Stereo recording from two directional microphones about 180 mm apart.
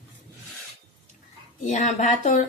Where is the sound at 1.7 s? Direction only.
40° left (ahead or behind).